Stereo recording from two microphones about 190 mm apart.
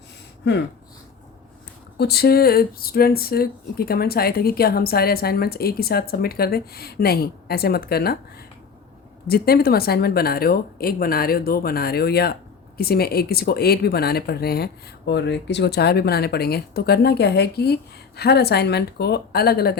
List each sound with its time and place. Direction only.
2.0 s speech: 55° left (ahead or behind)
9.2 s speech: 55° left (ahead or behind)